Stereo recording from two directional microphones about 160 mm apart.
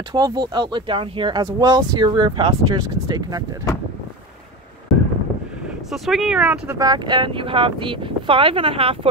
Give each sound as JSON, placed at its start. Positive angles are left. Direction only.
{"t": 0.1, "sound": "speech", "side_deg": -25}
{"t": 5.9, "sound": "speech", "side_deg": 0}
{"t": 6.8, "sound": "speech", "side_deg": -25}